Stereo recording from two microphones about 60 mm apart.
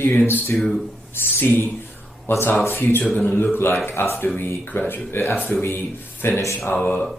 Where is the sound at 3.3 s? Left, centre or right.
Left.